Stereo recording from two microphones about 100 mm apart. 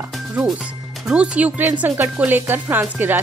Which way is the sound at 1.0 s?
10° right (ahead or behind).